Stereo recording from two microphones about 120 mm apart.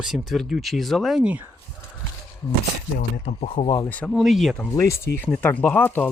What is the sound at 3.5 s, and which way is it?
Speech, 45° left (ahead or behind).